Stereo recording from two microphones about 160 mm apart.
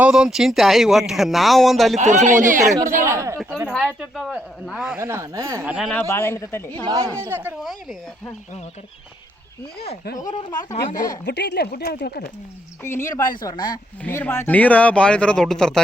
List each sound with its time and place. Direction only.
0.0 s speech: 5° right (ahead or behind)
2.0 s speech: 50° right (ahead or behind)
3.0 s speech: 15° right (ahead or behind)
3.7 s speech: 5° right (ahead or behind)
4.9 s speech: 15° right (ahead or behind)
5.6 s speech: 5° right (ahead or behind)
5.9 s speech: 15° left (ahead or behind)
6.8 s speech: 25° right (ahead or behind)
7.2 s speech: 15° right (ahead or behind)
7.6 s speech: centre (ahead or behind)
10.2 s speech: 25° left (ahead or behind)
11.3 s speech: 90° left; by 12.3 s 75° left (ahead or behind)
12.8 s speech: 15° left (ahead or behind)
14.0 s speech: 15° left (ahead or behind)